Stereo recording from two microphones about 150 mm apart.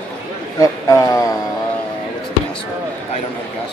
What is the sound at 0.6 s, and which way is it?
Speech, 20° left (ahead or behind).